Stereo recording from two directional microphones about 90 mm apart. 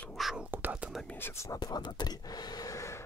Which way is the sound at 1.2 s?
30° left (ahead or behind).